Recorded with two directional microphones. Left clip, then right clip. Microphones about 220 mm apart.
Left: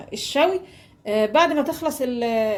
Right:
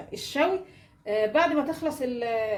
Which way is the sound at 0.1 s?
30° left (ahead or behind).